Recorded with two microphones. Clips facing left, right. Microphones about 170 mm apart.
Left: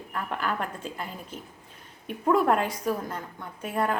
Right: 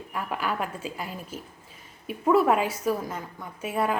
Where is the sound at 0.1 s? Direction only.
5° right (ahead or behind).